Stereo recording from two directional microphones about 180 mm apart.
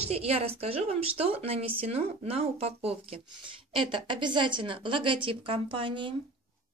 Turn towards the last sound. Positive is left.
turn(degrees=-30)  # may be behind; listen again after turning